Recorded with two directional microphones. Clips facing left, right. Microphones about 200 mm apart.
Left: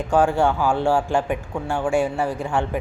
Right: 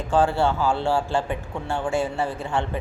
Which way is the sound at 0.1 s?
15° left (ahead or behind).